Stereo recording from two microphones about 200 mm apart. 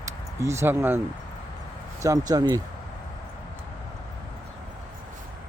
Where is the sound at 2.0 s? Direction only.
15° right (ahead or behind).